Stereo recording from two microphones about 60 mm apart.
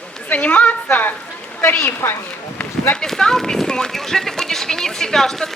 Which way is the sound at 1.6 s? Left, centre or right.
Left.